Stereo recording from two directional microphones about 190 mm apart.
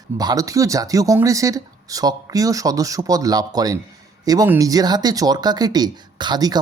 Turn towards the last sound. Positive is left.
turn(degrees=-20)  # may be behind; listen again after turning